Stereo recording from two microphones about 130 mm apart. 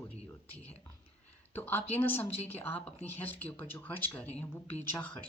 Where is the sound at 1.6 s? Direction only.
15° left (ahead or behind).